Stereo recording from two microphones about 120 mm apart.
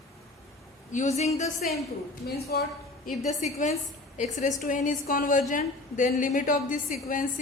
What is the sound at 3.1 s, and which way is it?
A woman's voice, 85° left.